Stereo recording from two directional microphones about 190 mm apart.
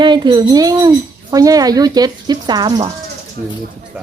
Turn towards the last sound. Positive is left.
turn(degrees=-50)  # may be behind; listen again after turning